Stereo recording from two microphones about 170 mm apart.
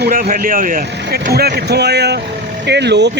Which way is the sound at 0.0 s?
55° right (ahead or behind).